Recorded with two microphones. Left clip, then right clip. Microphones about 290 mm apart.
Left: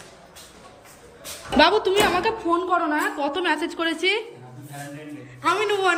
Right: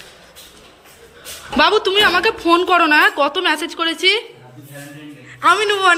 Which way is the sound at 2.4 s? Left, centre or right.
Right.